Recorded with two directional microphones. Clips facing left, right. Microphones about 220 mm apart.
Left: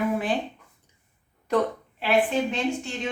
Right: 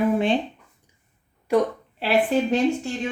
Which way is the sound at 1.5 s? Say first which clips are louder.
Right 3 dB; 10° right (ahead or behind).